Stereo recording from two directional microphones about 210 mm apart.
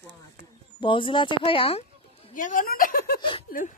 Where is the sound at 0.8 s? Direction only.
25° left (ahead or behind).